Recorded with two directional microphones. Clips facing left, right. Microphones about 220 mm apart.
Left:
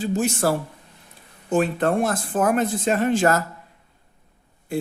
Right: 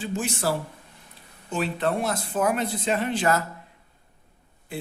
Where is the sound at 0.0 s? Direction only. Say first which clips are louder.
Left 6 dB; 40° left (ahead or behind).